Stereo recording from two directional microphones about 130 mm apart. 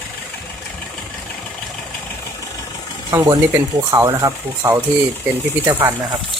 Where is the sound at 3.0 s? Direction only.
30° right (ahead or behind).